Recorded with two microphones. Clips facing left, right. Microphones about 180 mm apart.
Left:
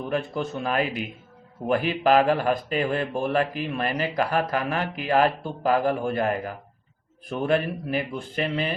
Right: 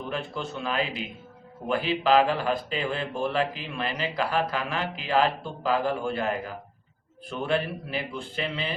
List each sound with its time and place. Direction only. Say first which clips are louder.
0.1 s a man's voice: left 6 dB; 45° left (ahead or behind)